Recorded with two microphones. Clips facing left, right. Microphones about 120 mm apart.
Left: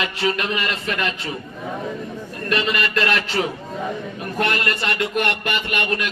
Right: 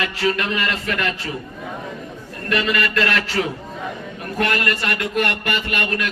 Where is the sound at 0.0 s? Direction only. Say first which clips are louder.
Right 1 dB; 20° left (ahead or behind).